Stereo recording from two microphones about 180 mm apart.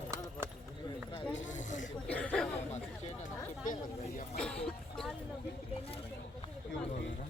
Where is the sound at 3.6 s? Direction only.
45° left (ahead or behind).